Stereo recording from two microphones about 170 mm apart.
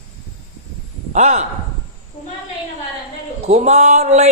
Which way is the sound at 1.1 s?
40° right (ahead or behind).